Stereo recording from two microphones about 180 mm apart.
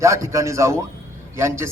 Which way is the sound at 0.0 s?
15° right (ahead or behind).